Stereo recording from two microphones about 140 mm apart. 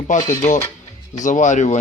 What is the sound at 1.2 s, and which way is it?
Speech, 60° left (ahead or behind).